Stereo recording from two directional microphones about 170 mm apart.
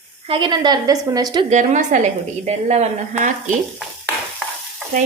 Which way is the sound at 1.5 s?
45° right (ahead or behind).